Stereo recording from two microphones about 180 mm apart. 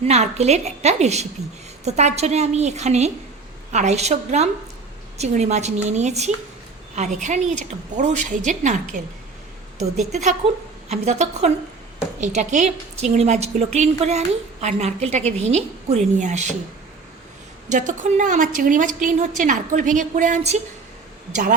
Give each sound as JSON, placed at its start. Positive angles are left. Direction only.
{"t": 0.0, "sound": "a woman's voice", "side_deg": -35}
{"t": 10.1, "sound": "a woman's voice", "side_deg": -40}
{"t": 17.7, "sound": "a woman's voice", "side_deg": -45}